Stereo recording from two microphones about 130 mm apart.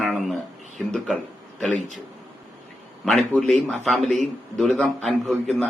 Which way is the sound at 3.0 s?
Centre (ahead or behind).